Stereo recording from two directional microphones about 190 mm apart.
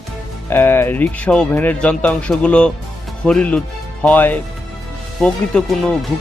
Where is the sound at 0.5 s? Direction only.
10° left (ahead or behind).